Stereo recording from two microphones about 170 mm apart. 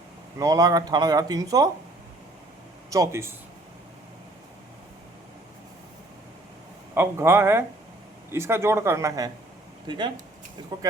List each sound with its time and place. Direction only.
0.3 s speech: 20° right (ahead or behind)
2.9 s speech: 15° right (ahead or behind)
6.9 s speech: 15° right (ahead or behind)